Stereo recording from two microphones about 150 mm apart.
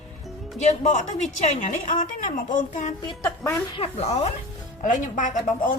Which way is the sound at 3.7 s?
40° left (ahead or behind).